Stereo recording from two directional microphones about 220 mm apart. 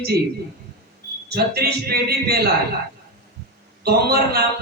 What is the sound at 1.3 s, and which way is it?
A man's voice, 45° right (ahead or behind).